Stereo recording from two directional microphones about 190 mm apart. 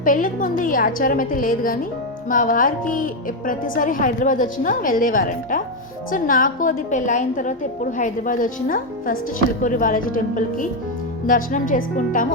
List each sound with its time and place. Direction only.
0.0 s a woman's voice: 45° left (ahead or behind)